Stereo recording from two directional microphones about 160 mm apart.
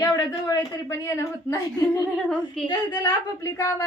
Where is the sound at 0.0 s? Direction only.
25° left (ahead or behind).